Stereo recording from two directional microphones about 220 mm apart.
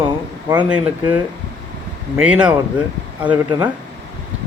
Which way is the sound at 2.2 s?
5° right (ahead or behind).